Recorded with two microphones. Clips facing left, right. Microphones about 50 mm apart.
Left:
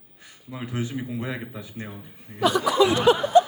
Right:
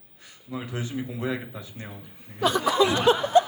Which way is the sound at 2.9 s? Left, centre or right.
Left.